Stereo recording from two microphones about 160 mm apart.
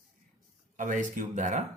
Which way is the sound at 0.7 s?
55° right (ahead or behind).